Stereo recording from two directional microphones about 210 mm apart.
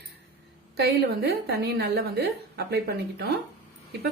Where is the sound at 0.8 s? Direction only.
50° right (ahead or behind).